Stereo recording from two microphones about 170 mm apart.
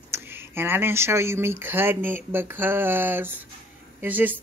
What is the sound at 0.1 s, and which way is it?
Speech, 15° right (ahead or behind).